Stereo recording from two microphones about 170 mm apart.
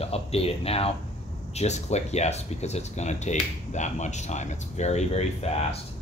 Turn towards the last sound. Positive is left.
turn(degrees=40)  # may be behind; listen again after turning